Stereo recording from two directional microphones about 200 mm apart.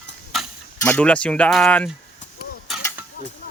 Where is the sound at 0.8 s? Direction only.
10° left (ahead or behind).